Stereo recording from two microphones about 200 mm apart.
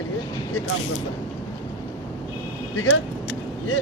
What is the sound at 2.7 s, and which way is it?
Speech, 75° left (ahead or behind).